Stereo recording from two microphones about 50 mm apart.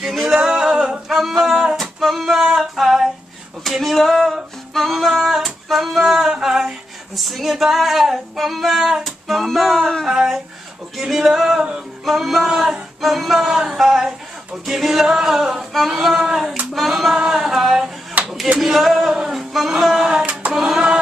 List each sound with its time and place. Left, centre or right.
0.0 s singing: centre
0.4 s music: centre
1.8 s female singing: centre
3.6 s music: centre
7.2 s music: centre
10.0 s a sound: centre
11.0 s music: centre
13.7 s a sound: centre
16.7 s music: centre
17.2 s a sound: centre
18.6 s music: centre
19.7 s a sound: centre